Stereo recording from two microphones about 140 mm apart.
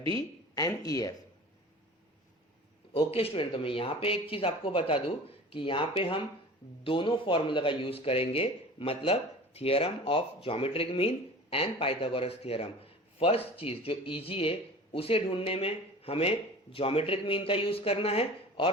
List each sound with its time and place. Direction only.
0.2 s a woman's voice: 25° left (ahead or behind)
2.9 s a man's voice: 45° left (ahead or behind)